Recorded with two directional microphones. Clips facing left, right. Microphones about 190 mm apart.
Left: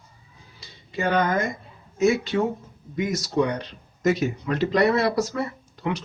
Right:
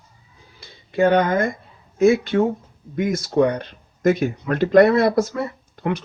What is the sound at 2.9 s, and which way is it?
Speech, 55° right (ahead or behind).